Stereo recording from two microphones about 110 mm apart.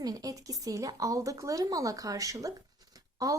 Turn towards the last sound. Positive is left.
turn(degrees=-30)  # may be behind; listen again after turning